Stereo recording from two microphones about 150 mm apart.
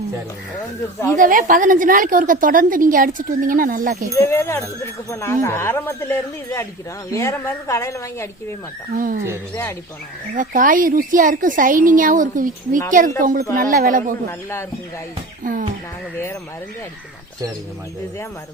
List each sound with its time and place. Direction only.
1.2 s a woman's voice: 65° right (ahead or behind)
4.3 s speech: 15° left (ahead or behind)
9.0 s a woman's voice: 65° right (ahead or behind)
10.3 s a woman's voice: 65° right (ahead or behind)